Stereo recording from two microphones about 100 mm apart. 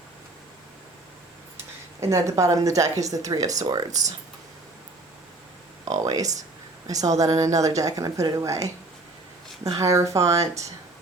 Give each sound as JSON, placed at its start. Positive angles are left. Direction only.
{"t": 2.0, "sound": "speech", "side_deg": -30}
{"t": 5.8, "sound": "speech", "side_deg": -35}
{"t": 9.7, "sound": "speech", "side_deg": -30}